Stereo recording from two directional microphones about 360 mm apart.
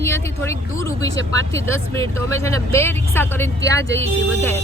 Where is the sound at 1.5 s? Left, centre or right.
Centre.